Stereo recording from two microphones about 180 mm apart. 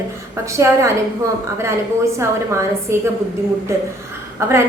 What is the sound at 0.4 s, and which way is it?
A woman's voice, 15° right (ahead or behind).